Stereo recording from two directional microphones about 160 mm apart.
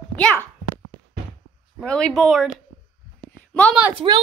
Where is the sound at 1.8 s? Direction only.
5° left (ahead or behind).